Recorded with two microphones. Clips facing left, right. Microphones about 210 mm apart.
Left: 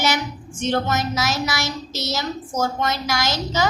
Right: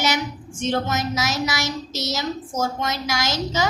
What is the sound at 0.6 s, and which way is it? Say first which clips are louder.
A woman's voice: left 1 dB; 60° left (ahead or behind).